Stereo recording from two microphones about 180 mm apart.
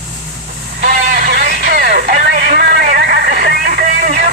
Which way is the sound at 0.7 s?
55° right (ahead or behind).